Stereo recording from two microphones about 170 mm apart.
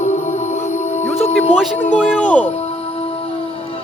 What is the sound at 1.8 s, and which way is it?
Speech, 10° left (ahead or behind).